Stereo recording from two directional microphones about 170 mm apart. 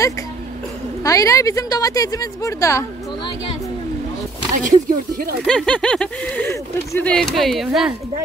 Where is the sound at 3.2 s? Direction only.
30° left (ahead or behind).